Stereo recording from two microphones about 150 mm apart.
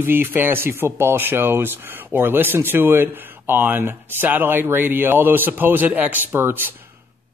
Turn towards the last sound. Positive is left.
turn(degrees=-15)  # may be behind; listen again after turning